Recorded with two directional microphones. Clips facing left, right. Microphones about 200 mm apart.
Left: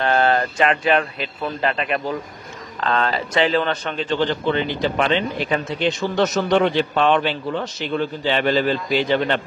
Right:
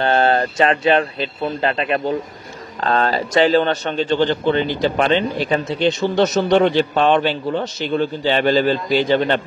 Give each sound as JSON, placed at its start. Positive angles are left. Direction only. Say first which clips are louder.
{"t": 0.0, "sound": "speech", "louder": "right 2 dB", "side_deg": -30}